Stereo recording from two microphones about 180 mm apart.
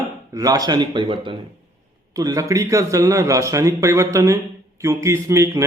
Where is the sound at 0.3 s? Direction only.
20° right (ahead or behind).